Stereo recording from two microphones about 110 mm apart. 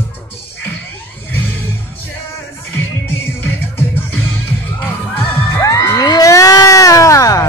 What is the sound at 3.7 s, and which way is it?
Music, 20° left (ahead or behind).